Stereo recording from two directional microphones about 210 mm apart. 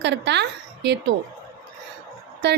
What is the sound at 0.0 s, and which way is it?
Speech, 55° right (ahead or behind).